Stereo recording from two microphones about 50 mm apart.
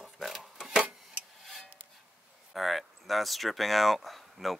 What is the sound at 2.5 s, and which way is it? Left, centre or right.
Speech, centre.